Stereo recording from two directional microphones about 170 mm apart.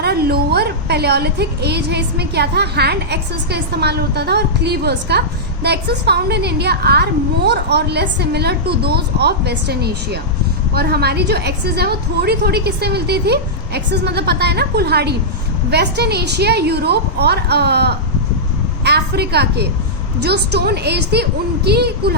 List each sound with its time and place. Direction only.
0.0 s a woman's voice: 70° right (ahead or behind)